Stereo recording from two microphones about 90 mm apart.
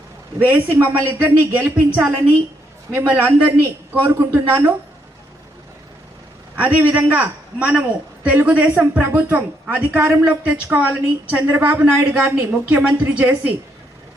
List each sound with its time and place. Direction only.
0.3 s a man's voice: 25° right (ahead or behind)
6.6 s a man's voice: 20° right (ahead or behind)